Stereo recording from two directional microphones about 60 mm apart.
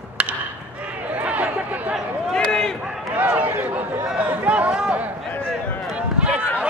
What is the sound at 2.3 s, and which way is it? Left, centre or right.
Run, centre.